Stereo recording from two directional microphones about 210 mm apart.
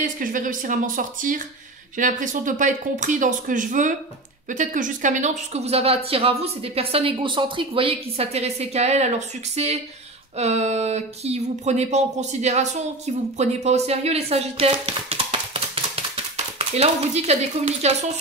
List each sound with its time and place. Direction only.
0.0 s speech: 40° right (ahead or behind)